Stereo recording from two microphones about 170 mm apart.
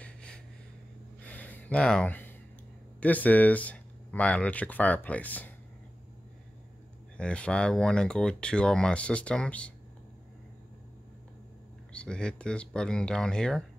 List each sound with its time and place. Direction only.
0.0 s a sound: 5° left (ahead or behind)
3.0 s speech: 10° left (ahead or behind)
7.2 s speech: 5° left (ahead or behind)
11.9 s speech: 5° left (ahead or behind)